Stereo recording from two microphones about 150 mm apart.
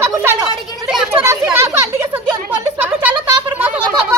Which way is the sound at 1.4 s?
15° right (ahead or behind).